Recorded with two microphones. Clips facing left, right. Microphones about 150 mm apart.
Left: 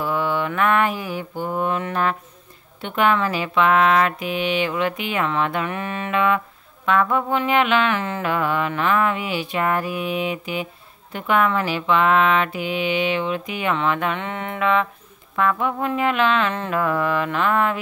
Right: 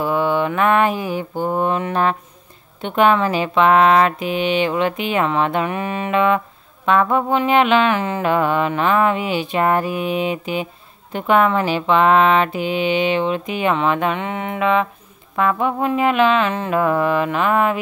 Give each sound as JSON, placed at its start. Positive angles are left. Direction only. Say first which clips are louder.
{"t": 0.0, "sound": "mantra", "louder": "right 4 dB", "side_deg": -20}
{"t": 1.3, "sound": "mantra", "louder": "right 5 dB", "side_deg": -45}
{"t": 1.6, "sound": "music", "louder": "right 2 dB", "side_deg": -25}
{"t": 15.9, "sound": "mantra", "louder": "right 4 dB", "side_deg": -15}